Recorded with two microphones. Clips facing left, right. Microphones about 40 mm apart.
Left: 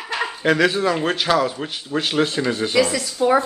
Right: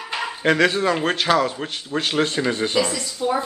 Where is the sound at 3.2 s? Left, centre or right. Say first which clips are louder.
Left 6 dB; left.